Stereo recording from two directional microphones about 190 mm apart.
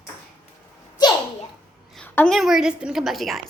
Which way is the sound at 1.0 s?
20° left (ahead or behind).